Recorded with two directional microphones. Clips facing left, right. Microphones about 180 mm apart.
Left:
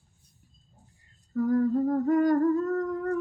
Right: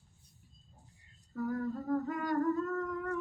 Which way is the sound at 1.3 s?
45° left (ahead or behind).